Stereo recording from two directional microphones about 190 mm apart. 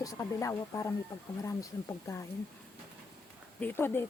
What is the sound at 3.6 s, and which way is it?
Speech, 10° left (ahead or behind).